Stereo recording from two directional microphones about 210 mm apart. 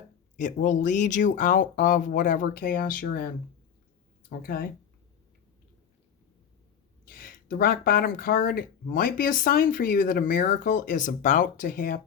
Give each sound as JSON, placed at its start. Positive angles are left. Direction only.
{"t": 0.3, "sound": "speech", "side_deg": 35}
{"t": 4.3, "sound": "speech", "side_deg": 45}
{"t": 7.1, "sound": "speech", "side_deg": 40}